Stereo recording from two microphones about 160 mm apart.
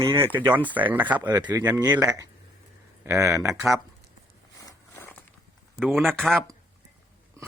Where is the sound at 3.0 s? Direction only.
20° right (ahead or behind).